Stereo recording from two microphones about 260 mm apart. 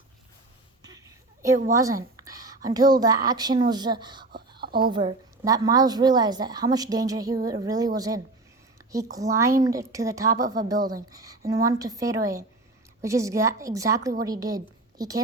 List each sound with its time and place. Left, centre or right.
0.8 s a sound: centre
2.7 s a woman's voice: centre
4.3 s whispering: right
4.8 s a woman's voice: centre